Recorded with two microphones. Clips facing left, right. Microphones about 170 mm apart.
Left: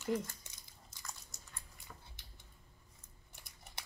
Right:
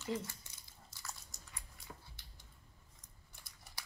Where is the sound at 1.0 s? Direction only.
Centre (ahead or behind).